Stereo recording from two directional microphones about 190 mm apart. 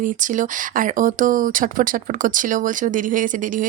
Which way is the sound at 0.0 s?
45° right (ahead or behind).